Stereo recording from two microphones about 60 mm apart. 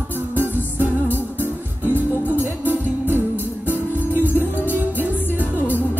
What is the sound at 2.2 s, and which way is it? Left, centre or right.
Music, left.